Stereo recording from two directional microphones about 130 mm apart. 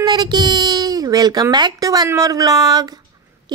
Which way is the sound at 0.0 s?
35° right (ahead or behind).